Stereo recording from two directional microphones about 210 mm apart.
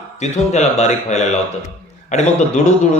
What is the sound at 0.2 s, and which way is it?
Mantra, 35° left (ahead or behind).